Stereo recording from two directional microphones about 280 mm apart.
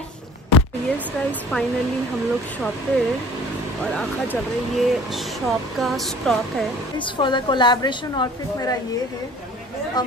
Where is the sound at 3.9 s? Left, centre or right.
Centre.